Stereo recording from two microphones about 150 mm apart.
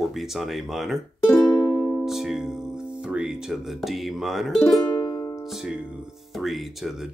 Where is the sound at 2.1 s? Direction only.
5° right (ahead or behind).